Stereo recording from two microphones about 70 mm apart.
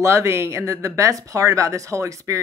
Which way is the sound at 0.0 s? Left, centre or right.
Right.